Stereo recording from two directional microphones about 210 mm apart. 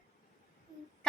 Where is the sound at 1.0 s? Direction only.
5° left (ahead or behind).